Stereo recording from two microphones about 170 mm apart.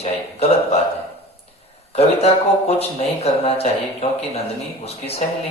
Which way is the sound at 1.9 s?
35° left (ahead or behind).